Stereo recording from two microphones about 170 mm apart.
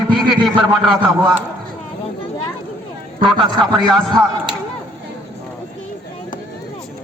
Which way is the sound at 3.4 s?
25° right (ahead or behind).